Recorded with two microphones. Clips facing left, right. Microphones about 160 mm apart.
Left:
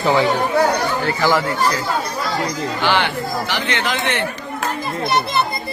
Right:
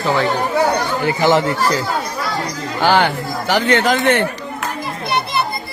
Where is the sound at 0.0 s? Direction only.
15° left (ahead or behind).